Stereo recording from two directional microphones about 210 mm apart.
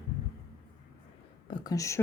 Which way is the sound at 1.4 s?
20° left (ahead or behind).